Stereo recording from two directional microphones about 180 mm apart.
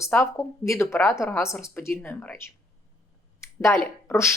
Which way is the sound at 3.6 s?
15° left (ahead or behind).